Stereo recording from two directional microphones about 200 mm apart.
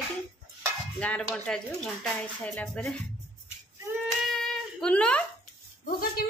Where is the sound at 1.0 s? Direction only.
5° left (ahead or behind).